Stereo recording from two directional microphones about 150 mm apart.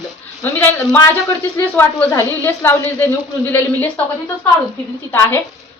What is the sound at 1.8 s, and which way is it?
Speech, 15° left (ahead or behind).